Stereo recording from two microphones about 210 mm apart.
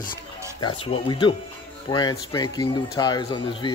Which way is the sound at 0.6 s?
25° left (ahead or behind).